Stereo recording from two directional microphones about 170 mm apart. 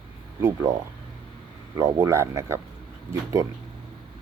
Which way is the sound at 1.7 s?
20° right (ahead or behind).